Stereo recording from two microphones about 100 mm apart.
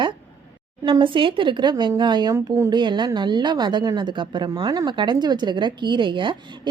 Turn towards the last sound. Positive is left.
turn(degrees=-55)  # may be behind; listen again after turning